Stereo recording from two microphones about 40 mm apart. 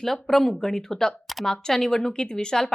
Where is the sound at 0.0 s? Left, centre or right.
Centre.